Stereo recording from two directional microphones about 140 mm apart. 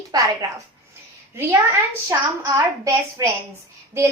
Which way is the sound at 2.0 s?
20° right (ahead or behind).